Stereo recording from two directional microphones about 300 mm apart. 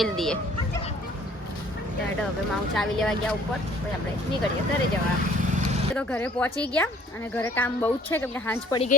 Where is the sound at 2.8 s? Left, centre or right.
Centre.